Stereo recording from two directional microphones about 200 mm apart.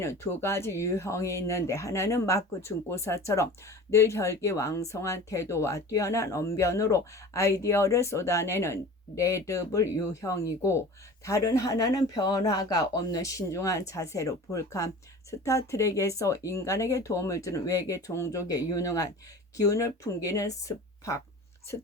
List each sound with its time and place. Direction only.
0.0 s speech: 15° left (ahead or behind)